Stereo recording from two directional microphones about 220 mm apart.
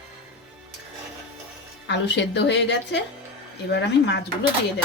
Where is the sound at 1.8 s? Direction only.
50° left (ahead or behind).